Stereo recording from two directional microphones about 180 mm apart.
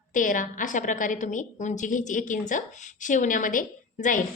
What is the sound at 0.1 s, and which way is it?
A woman's voice, 45° left (ahead or behind).